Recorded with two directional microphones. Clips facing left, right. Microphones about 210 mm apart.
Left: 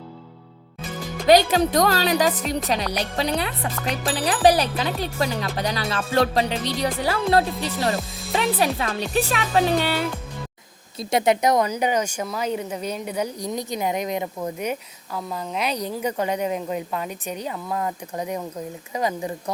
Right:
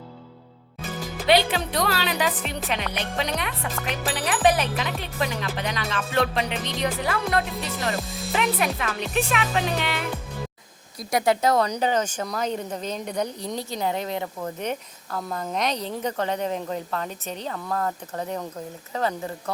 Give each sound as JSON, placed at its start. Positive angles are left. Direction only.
{"t": 1.3, "sound": "speech", "side_deg": 40}
{"t": 3.8, "sound": "music", "side_deg": 0}
{"t": 4.1, "sound": "speech", "side_deg": 35}
{"t": 10.9, "sound": "speech", "side_deg": 20}